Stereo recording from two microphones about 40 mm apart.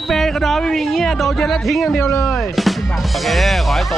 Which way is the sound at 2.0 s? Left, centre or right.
Left.